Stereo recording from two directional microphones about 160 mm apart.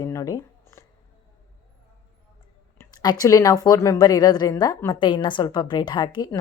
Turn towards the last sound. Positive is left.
turn(degrees=25)  # may be behind; listen again after turning